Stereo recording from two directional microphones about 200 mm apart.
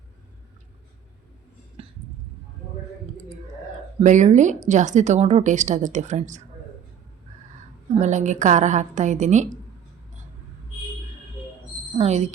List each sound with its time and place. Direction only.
1.8 s a sound: 30° right (ahead or behind)
4.0 s a woman's voice: 35° right (ahead or behind)
7.9 s a woman's voice: 35° right (ahead or behind)
11.9 s a woman's voice: 35° right (ahead or behind)